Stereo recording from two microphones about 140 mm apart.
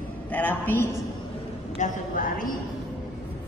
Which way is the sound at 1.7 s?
70° left (ahead or behind).